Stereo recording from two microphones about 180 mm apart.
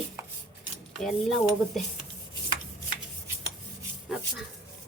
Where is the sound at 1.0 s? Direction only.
Centre (ahead or behind).